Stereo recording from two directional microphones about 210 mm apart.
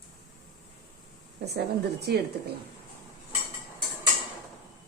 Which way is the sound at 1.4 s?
50° right (ahead or behind).